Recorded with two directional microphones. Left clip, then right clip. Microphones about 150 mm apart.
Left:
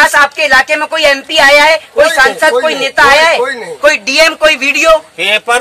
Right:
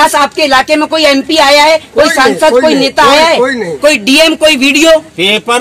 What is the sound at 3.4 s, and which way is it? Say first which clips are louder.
Speech: right 4 dB; 80° left.